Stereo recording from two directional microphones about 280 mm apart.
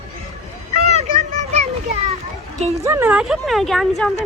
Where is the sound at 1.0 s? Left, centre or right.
Right.